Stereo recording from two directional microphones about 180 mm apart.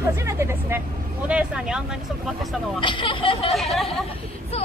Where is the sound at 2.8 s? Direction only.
30° left (ahead or behind).